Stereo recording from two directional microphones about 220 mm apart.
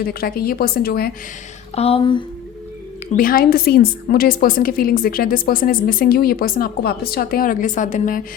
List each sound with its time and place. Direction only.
0.0 s a woman's voice: 45° left (ahead or behind)
1.7 s a sound: 25° left (ahead or behind)
3.1 s a woman's voice: 40° left (ahead or behind)